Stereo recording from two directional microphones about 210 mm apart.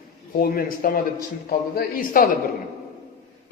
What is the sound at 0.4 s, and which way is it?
A man's voice, 45° left (ahead or behind).